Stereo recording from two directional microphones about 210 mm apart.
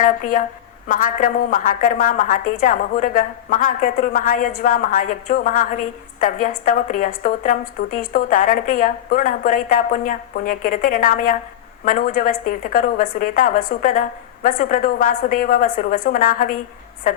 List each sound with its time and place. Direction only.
0.0 s a woman's voice: 40° left (ahead or behind)